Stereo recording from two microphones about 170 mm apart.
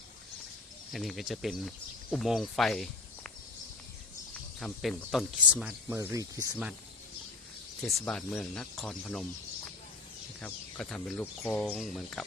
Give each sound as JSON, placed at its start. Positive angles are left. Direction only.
{"t": 0.9, "sound": "speech", "side_deg": 0}
{"t": 4.6, "sound": "speech", "side_deg": 5}
{"t": 6.0, "sound": "speech", "side_deg": -20}
{"t": 7.9, "sound": "speech", "side_deg": 0}
{"t": 10.4, "sound": "speech", "side_deg": 5}